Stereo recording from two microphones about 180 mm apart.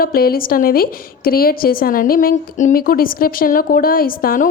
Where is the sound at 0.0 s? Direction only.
55° left (ahead or behind).